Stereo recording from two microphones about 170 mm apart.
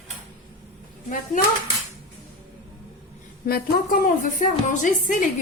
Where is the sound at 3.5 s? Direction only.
60° left (ahead or behind).